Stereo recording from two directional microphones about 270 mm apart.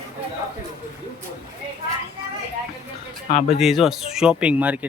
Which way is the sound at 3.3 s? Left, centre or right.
Left.